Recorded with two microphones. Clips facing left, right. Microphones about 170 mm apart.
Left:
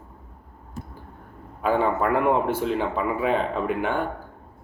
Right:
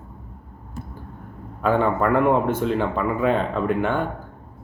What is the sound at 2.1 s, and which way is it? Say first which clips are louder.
Speech: right 4 dB; 50° right (ahead or behind).